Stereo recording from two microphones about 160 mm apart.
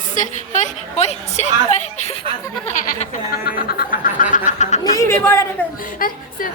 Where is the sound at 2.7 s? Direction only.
50° left (ahead or behind).